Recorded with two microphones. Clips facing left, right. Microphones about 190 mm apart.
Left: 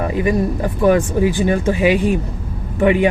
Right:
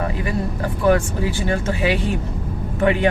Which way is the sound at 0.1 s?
20° left (ahead or behind).